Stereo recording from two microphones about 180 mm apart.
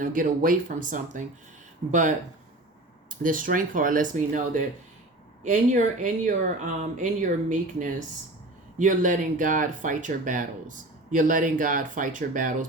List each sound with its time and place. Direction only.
0.0 s speech: 45° right (ahead or behind)
8.8 s speech: 45° right (ahead or behind)